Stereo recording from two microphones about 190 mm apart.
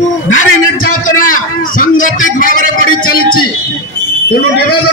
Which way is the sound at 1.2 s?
45° left (ahead or behind).